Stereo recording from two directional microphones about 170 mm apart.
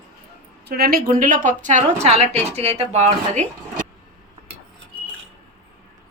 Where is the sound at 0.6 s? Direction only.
65° right (ahead or behind); by 3.1 s 40° right (ahead or behind).